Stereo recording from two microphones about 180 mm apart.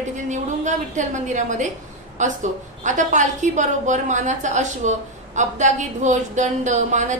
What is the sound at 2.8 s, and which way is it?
A woman's voice, 45° right (ahead or behind).